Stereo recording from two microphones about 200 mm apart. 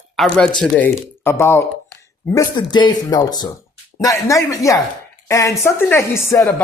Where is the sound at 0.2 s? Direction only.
Centre (ahead or behind).